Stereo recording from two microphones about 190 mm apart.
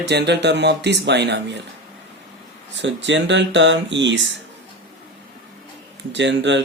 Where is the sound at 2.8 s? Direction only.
70° right (ahead or behind).